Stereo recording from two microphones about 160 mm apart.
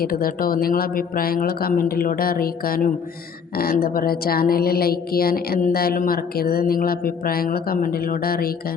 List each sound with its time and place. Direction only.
0.0 s a woman's voice: 65° left (ahead or behind)